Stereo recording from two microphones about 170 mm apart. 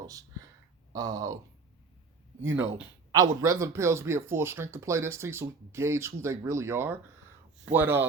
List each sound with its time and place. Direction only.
0.0 s speech: 20° right (ahead or behind)
3.1 s speech: 20° right (ahead or behind)